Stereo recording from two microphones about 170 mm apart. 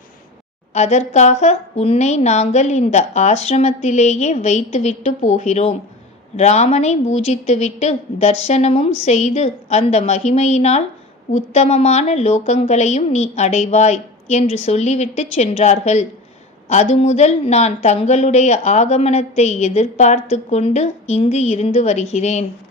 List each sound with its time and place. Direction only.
0.7 s a woman's voice: 40° left (ahead or behind)